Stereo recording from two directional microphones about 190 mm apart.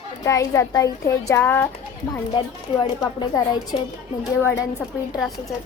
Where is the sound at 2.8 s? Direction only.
20° left (ahead or behind).